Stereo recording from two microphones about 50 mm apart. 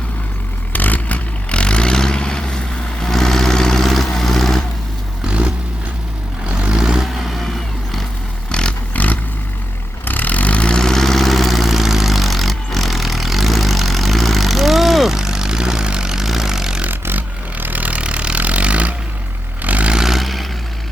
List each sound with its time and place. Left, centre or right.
0.7 s vehicle: left; by 4.6 s centre
5.2 s vehicle: right
6.8 s vehicle: centre
7.2 s vehicle: centre
8.5 s vehicle: centre
8.9 s vehicle: left; by 16.8 s centre
16.9 s vehicle: right
19.9 s vehicle: centre